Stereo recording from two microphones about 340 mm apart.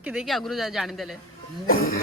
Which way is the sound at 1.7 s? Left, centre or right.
Left.